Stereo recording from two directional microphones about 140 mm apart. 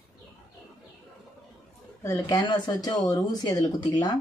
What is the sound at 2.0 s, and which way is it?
Speech, 25° left (ahead or behind).